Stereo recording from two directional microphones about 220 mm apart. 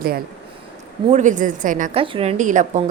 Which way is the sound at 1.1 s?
35° right (ahead or behind).